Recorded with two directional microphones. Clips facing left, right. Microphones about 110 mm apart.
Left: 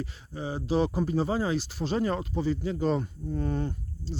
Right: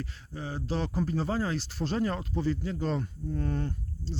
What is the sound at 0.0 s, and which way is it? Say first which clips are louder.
Speech: left 3 dB; 10° left (ahead or behind).